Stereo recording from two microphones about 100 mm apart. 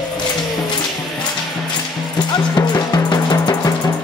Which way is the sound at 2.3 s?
45° left (ahead or behind).